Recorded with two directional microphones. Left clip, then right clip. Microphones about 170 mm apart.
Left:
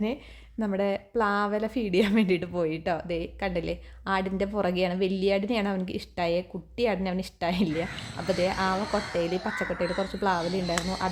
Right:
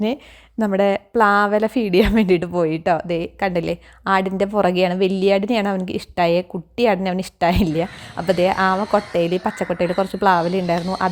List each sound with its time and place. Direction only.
0.6 s a woman's voice: 40° right (ahead or behind)